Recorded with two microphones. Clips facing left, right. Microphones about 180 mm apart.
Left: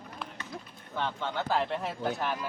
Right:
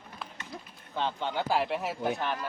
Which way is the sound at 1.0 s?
20° right (ahead or behind).